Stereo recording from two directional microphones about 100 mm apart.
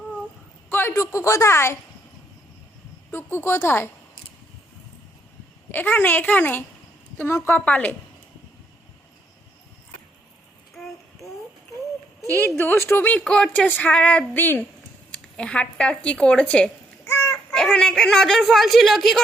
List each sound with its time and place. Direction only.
0.7 s a sound: 20° left (ahead or behind)
0.9 s a woman's voice: 30° left (ahead or behind)
3.1 s speech: 20° left (ahead or behind)
5.7 s speech: 20° left (ahead or behind)
10.8 s child singing: 5° left (ahead or behind)
12.5 s speech: 25° left (ahead or behind)
17.1 s a sound: 30° left (ahead or behind)
17.3 s speech: 5° left (ahead or behind)